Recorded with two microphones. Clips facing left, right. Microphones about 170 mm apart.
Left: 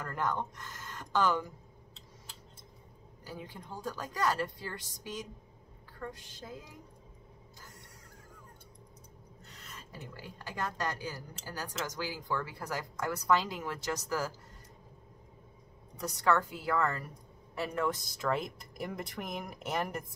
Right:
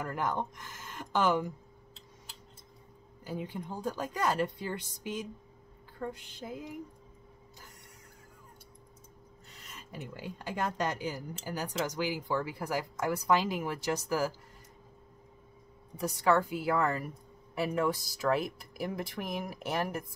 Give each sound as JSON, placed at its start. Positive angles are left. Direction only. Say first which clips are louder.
{"t": 0.0, "sound": "speech", "louder": "right 1 dB", "side_deg": -15}
{"t": 3.3, "sound": "a woman's voice", "louder": "right 6 dB", "side_deg": -20}
{"t": 9.7, "sound": "speech", "louder": "right 4 dB", "side_deg": -15}
{"t": 16.0, "sound": "speech", "louder": "right 2 dB", "side_deg": -10}